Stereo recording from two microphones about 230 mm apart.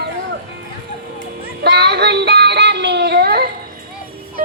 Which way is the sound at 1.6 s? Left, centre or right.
Right.